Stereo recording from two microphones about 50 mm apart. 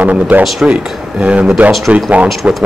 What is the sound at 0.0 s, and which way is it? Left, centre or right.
Speech, right.